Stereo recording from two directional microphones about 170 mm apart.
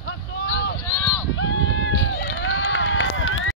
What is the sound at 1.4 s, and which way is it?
Run, 90° left.